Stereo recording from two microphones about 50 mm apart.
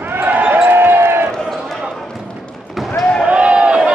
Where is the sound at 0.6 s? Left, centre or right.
Right.